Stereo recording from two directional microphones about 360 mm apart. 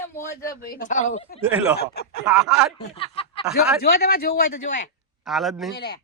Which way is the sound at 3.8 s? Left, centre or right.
Left.